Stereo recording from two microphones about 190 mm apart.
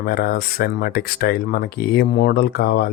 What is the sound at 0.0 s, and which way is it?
Speech, 55° left (ahead or behind).